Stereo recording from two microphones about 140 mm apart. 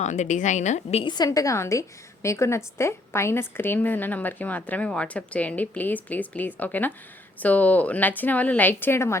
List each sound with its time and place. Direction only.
0.0 s a woman's voice: 60° left (ahead or behind)
1.0 s a woman's voice: 30° left (ahead or behind)